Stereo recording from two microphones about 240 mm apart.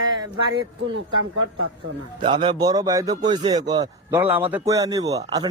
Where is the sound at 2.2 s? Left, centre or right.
Centre.